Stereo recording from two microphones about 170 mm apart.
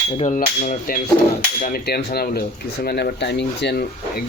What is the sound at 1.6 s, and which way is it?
Speech, 60° left (ahead or behind).